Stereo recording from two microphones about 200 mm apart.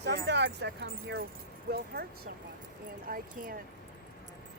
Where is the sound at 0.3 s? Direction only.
60° right (ahead or behind).